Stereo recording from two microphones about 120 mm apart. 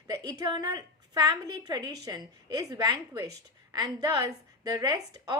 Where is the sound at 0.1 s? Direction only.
30° right (ahead or behind).